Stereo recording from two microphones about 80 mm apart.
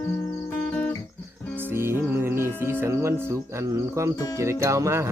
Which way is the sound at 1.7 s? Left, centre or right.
Right.